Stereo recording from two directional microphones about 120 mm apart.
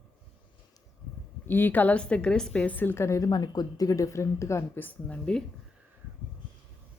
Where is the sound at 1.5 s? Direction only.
15° left (ahead or behind).